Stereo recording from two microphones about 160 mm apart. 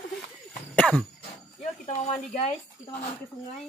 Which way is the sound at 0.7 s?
5° left (ahead or behind).